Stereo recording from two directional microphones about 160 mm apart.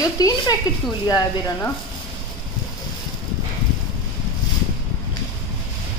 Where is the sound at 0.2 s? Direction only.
25° left (ahead or behind).